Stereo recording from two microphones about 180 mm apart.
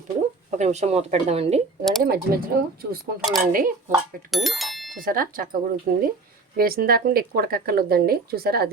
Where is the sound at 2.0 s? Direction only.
60° right (ahead or behind).